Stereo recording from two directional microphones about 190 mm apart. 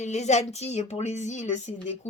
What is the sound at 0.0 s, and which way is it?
Speech, 35° left (ahead or behind).